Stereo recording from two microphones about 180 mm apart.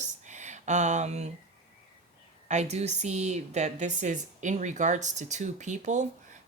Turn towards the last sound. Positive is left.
turn(degrees=-40)  # may be behind; listen again after turning